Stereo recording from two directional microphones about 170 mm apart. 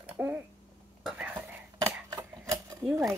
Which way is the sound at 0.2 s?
15° right (ahead or behind).